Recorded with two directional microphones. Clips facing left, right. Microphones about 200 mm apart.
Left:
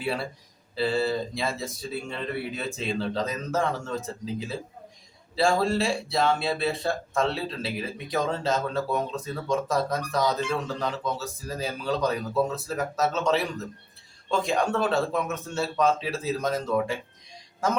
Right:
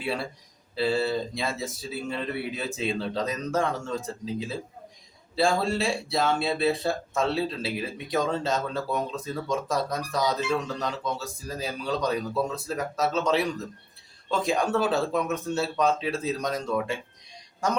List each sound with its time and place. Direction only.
0.0 s speech: centre (ahead or behind)